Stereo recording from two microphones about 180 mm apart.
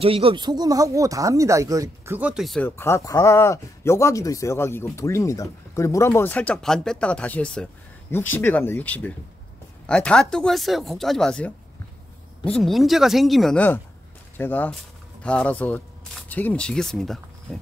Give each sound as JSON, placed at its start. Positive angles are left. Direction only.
{"t": 0.0, "sound": "speech", "side_deg": -30}
{"t": 2.7, "sound": "speech", "side_deg": 15}